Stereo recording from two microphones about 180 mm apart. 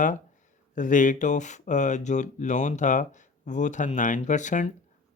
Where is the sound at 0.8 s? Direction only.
45° left (ahead or behind).